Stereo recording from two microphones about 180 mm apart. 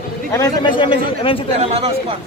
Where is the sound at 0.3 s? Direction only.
20° left (ahead or behind).